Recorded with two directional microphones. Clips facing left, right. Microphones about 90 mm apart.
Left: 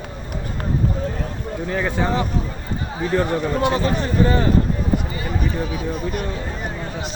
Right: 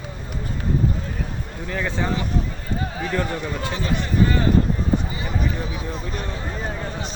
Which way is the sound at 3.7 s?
40° left (ahead or behind).